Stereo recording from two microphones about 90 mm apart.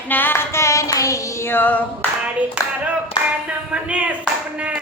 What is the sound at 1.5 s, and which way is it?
Child singing, 20° left (ahead or behind).